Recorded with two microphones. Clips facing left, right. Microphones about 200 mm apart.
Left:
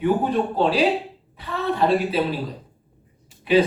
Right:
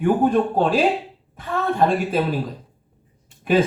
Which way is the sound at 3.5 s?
45° right (ahead or behind).